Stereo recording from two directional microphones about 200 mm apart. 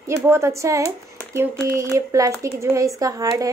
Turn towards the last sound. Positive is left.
turn(degrees=-15)  # may be behind; listen again after turning